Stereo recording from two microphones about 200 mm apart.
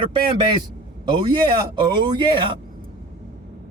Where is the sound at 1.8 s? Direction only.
25° right (ahead or behind).